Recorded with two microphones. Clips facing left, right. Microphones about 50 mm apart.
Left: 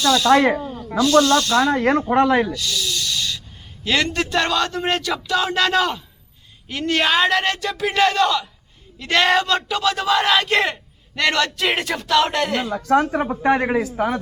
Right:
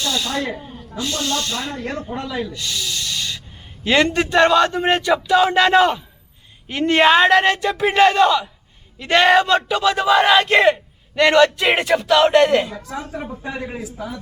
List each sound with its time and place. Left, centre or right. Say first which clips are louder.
0.3 s speech: left 8 dB; left
0.6 s snake: left 7 dB; centre
1.2 s speech: left 6 dB; right
1.7 s speech: left 10 dB; left
2.5 s snake: left 2 dB; right
3.8 s speech: right 4 dB; right
12.7 s speech: left 11 dB; left